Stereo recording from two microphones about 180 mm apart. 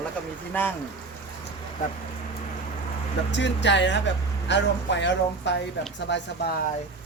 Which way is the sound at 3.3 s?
75° left (ahead or behind).